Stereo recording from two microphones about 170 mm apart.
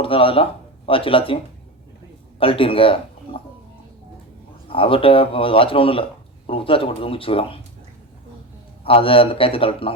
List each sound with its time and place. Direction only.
0.0 s speech: 30° left (ahead or behind)
2.4 s a man's voice: 30° left (ahead or behind)
4.7 s speech: 30° left (ahead or behind)
8.8 s speech: 30° left (ahead or behind)